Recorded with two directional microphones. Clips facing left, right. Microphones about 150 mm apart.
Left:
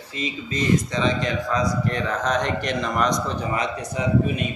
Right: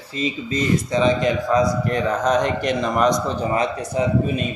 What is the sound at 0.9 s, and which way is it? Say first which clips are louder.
A man's voice: right 5 dB; 40° right (ahead or behind).